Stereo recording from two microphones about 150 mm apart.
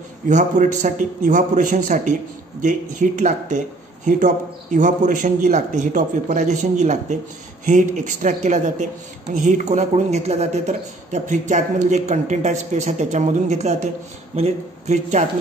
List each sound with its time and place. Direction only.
0.3 s a man's voice: 55° right (ahead or behind)